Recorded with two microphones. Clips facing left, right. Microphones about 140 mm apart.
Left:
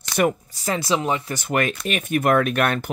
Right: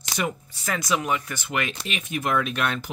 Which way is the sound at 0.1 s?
55° left (ahead or behind).